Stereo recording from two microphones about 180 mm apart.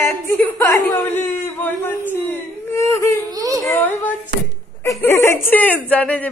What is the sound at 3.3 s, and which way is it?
Whimper, 20° right (ahead or behind).